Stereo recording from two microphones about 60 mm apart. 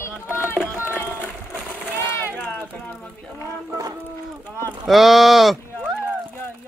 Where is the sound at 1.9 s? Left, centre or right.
Left.